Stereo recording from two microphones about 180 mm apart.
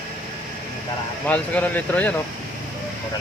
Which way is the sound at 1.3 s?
10° left (ahead or behind).